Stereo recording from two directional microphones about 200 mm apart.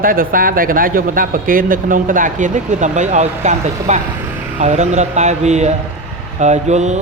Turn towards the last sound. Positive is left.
turn(degrees=-35)  # may be behind; listen again after turning